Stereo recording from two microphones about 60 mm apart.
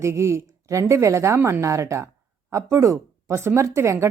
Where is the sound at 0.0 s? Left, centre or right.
Right.